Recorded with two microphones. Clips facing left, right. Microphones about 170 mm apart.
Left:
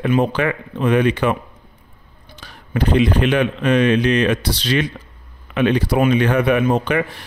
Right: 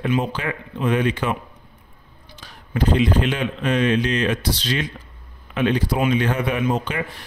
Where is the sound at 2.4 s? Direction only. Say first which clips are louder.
Left 1 dB; 65° left (ahead or behind).